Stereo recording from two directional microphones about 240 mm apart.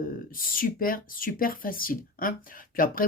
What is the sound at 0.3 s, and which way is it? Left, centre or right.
Speech, left.